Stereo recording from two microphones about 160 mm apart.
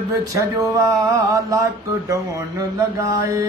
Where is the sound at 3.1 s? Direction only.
20° right (ahead or behind).